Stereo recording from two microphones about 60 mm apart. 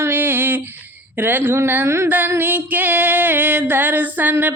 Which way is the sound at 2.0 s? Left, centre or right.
Right.